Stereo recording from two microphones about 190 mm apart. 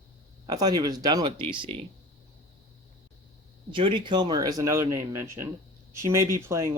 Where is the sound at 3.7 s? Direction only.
25° right (ahead or behind).